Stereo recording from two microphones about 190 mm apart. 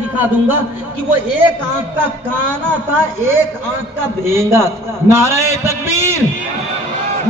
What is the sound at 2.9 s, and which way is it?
A man's voice, 10° right (ahead or behind).